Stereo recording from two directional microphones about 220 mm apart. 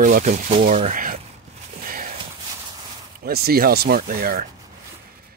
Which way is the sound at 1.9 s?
40° right (ahead or behind).